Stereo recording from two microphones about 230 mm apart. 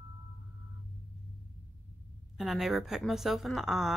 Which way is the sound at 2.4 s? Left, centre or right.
Centre.